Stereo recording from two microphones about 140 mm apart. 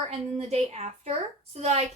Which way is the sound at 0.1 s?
50° right (ahead or behind).